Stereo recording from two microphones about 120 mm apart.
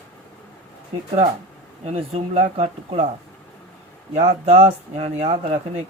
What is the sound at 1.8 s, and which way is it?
Speech, 60° right (ahead or behind).